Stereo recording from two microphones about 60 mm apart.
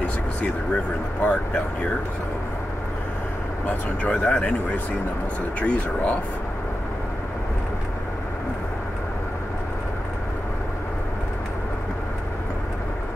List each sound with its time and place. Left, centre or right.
0.4 s speech: left
3.6 s speech: left